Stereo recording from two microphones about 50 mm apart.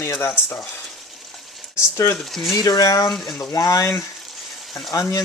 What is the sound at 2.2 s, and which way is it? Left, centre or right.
Speech, centre.